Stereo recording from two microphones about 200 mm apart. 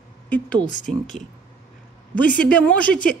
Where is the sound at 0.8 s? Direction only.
40° left (ahead or behind).